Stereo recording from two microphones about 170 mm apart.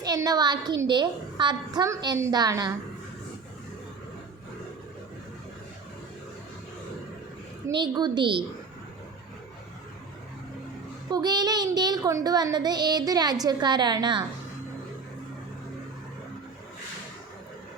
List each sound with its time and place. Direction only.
0.0 s child singing: 20° right (ahead or behind)
7.8 s child singing: 25° right (ahead or behind)
11.1 s child singing: 25° right (ahead or behind)